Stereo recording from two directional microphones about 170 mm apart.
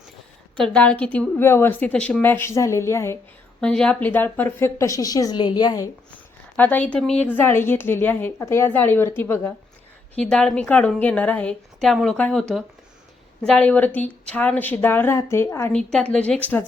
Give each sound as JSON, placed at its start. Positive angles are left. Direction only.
{"t": 0.5, "sound": "a woman's voice", "side_deg": 5}
{"t": 3.6, "sound": "a woman's voice", "side_deg": 5}
{"t": 6.6, "sound": "a woman's voice", "side_deg": 10}
{"t": 15.9, "sound": "a woman's voice", "side_deg": 5}